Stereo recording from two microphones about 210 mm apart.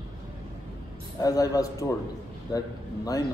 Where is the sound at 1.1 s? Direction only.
15° left (ahead or behind).